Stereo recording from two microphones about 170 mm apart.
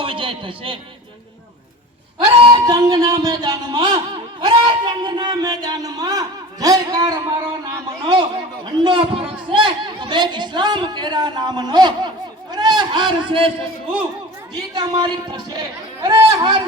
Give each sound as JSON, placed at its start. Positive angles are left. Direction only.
{"t": 0.0, "sound": "a sound", "side_deg": -30}
{"t": 2.1, "sound": "a man's voice", "side_deg": -25}
{"t": 14.8, "sound": "a man's voice", "side_deg": -30}